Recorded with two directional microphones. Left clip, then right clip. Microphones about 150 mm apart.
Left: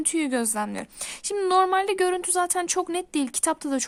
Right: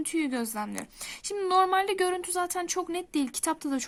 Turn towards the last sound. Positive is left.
turn(degrees=30)  # may be behind; listen again after turning